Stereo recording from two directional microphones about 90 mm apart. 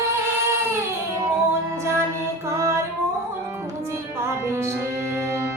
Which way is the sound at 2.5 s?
35° right (ahead or behind).